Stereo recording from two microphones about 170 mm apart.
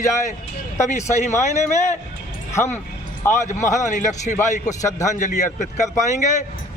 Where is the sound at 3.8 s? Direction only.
45° left (ahead or behind).